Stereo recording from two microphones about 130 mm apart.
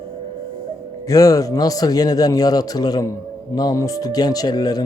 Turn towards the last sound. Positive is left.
turn(degrees=30)  # may be behind; listen again after turning